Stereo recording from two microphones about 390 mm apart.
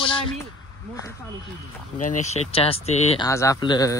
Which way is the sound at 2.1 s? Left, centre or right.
Centre.